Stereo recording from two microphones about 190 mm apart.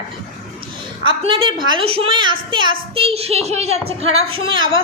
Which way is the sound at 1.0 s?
25° right (ahead or behind).